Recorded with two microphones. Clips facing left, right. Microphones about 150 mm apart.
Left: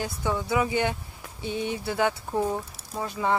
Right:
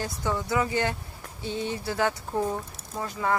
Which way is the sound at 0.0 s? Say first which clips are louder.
Left 1 dB; 10° left (ahead or behind).